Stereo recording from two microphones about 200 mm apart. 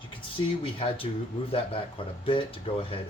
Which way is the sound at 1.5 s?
25° left (ahead or behind).